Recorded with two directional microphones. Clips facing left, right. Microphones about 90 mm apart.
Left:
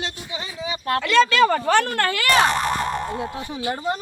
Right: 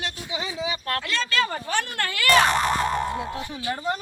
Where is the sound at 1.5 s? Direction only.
70° left (ahead or behind).